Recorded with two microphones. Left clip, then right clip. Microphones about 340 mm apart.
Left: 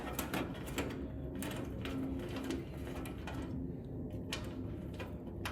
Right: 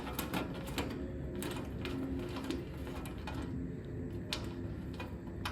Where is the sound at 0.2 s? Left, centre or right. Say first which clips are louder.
Right 2 dB; centre.